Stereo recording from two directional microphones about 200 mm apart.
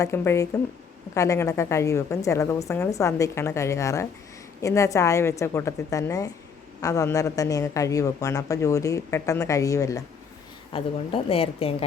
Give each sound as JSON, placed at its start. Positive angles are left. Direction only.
{"t": 0.0, "sound": "speech", "side_deg": 15}
{"t": 10.7, "sound": "a woman's voice", "side_deg": 30}